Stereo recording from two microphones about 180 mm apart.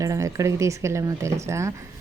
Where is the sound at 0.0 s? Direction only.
15° right (ahead or behind).